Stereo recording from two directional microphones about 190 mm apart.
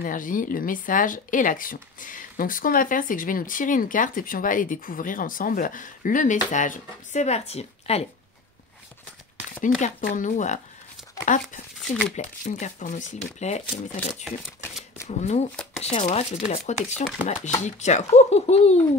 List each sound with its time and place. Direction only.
0.0 s speech: 45° left (ahead or behind)
9.6 s speech: 40° left (ahead or behind)
15.0 s speech: 35° left (ahead or behind)